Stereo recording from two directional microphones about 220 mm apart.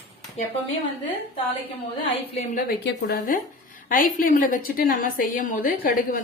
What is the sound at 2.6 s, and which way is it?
A woman's voice, 45° left (ahead or behind).